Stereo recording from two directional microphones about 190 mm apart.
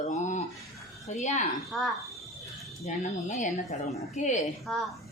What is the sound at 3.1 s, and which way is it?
Speech, 40° left (ahead or behind).